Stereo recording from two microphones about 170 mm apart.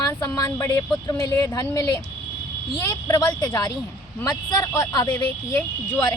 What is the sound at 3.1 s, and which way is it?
Speech, 25° left (ahead or behind).